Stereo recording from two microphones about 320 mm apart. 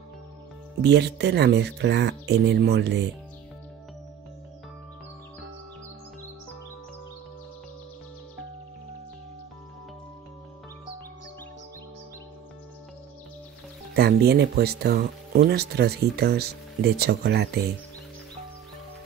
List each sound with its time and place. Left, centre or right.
0.8 s speech: right
13.9 s speech: right